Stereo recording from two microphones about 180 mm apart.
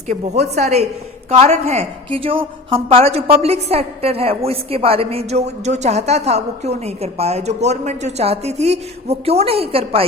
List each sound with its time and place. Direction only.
0.1 s a woman's voice: 40° right (ahead or behind)